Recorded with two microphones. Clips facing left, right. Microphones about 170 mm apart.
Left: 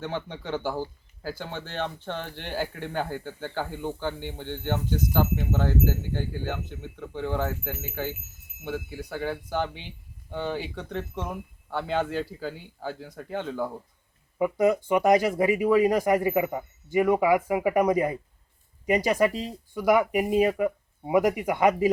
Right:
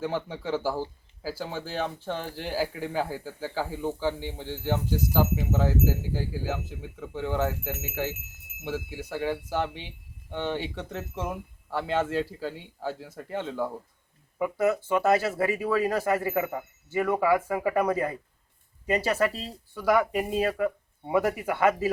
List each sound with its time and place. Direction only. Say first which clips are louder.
0.0 s speech: right 2 dB; 5° right (ahead or behind)
14.3 s speech: left 3 dB; 20° left (ahead or behind)